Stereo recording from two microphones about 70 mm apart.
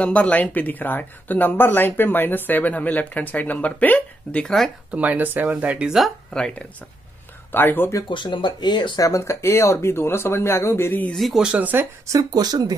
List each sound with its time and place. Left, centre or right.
0.0 s speech: centre
4.9 s speech: right
7.5 s speech: left
8.3 s speech: left
9.0 s speech: left
11.1 s speech: centre
11.4 s speech: centre
12.1 s speech: right